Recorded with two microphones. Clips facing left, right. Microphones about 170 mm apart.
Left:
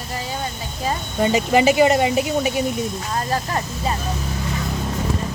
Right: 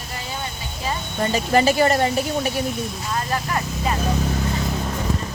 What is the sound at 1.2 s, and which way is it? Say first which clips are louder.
Speech: left 2 dB; 15° left (ahead or behind).